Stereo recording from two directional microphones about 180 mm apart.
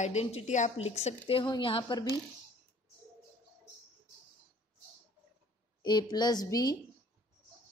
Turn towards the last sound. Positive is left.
turn(degrees=20)  # may be behind; listen again after turning